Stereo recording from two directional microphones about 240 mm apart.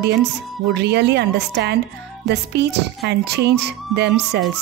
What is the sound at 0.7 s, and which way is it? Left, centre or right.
Music, right.